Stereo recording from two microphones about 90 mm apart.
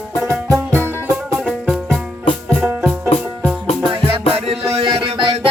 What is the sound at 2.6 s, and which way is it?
Music, 20° right (ahead or behind).